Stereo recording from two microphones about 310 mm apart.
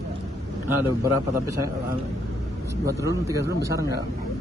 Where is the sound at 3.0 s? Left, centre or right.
Centre.